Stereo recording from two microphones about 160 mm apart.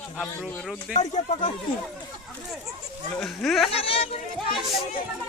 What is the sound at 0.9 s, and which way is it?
Speech, 45° left (ahead or behind).